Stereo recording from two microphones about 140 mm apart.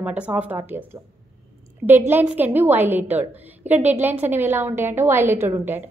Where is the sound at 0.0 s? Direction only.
10° right (ahead or behind).